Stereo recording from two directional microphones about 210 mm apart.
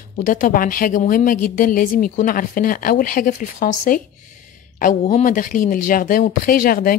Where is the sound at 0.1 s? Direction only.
40° left (ahead or behind).